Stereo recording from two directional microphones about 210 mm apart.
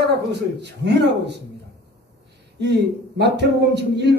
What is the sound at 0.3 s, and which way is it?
A man's voice, 55° right (ahead or behind).